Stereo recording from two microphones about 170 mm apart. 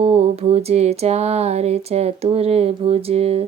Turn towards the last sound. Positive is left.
turn(degrees=-35)  # may be behind; listen again after turning